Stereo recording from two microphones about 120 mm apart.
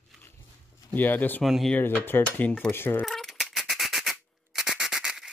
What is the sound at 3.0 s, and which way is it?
Rub, centre (ahead or behind).